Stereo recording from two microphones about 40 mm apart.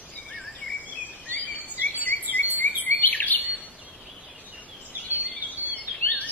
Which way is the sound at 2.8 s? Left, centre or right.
Left.